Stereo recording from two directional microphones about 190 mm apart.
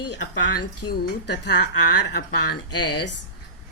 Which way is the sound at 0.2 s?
65° left (ahead or behind).